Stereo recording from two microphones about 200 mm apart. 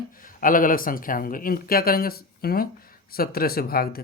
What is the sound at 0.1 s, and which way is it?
Speech, 45° left (ahead or behind).